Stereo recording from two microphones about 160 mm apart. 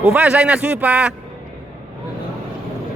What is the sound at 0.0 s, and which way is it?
A man's voice, 5° right (ahead or behind).